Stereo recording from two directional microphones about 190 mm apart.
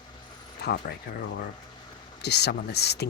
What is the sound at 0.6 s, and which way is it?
Speech, 60° left (ahead or behind).